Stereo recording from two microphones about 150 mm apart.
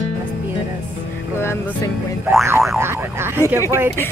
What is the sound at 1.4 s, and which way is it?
Music, 15° left (ahead or behind).